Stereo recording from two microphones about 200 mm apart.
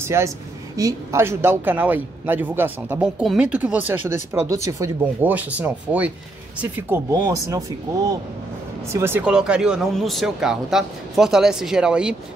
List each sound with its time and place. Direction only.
0.0 s speech: 15° right (ahead or behind)
8.9 s speech: 10° right (ahead or behind)